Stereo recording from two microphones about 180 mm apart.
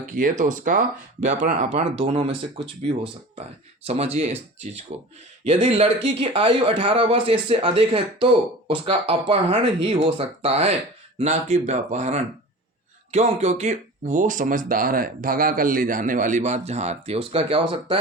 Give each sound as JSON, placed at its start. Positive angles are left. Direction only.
{"t": 0.1, "sound": "speech", "side_deg": -45}